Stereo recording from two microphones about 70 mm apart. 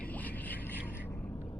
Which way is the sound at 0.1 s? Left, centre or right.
Left.